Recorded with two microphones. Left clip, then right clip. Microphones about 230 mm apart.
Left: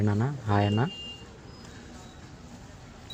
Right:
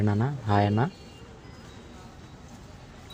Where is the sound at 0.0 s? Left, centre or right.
Centre.